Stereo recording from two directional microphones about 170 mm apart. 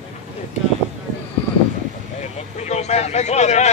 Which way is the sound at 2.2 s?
40° left (ahead or behind).